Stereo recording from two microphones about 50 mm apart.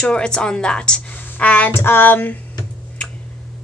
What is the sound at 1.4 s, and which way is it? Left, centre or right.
Speech, left.